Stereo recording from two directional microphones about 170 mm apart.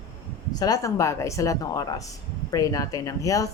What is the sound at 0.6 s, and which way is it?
A woman's voice, 20° left (ahead or behind).